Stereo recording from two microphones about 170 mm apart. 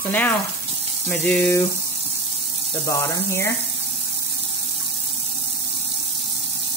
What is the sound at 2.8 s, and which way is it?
Speech, 15° left (ahead or behind).